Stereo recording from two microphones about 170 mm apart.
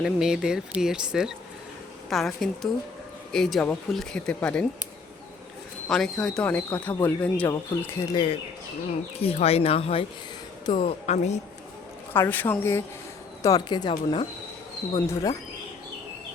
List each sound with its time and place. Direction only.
0.0 s speech: 5° right (ahead or behind)
5.9 s speech: centre (ahead or behind)
8.1 s speech: 30° left (ahead or behind)
12.1 s speech: 10° left (ahead or behind)
13.4 s speech: 25° left (ahead or behind)
14.9 s speech: 20° left (ahead or behind)